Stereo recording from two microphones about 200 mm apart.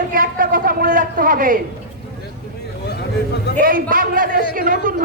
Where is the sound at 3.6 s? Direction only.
45° right (ahead or behind).